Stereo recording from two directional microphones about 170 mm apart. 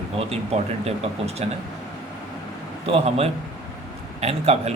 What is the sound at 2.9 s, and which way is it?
Speech, 35° right (ahead or behind).